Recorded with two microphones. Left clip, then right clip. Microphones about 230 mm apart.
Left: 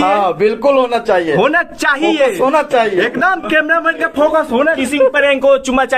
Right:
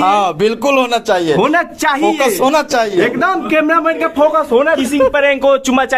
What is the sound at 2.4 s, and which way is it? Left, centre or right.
Speech, right.